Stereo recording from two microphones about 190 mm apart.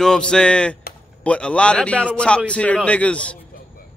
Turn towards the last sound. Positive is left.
turn(degrees=5)  # may be behind; listen again after turning